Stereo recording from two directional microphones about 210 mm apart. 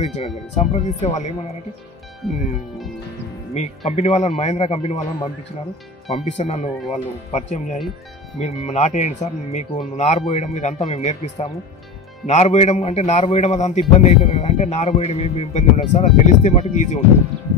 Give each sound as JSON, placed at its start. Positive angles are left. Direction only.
{"t": 0.0, "sound": "a man's voice", "side_deg": 30}
{"t": 2.2, "sound": "speech", "side_deg": 0}
{"t": 3.5, "sound": "a man's voice", "side_deg": 30}